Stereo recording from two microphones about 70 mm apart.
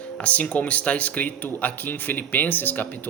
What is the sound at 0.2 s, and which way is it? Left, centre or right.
Speech, centre.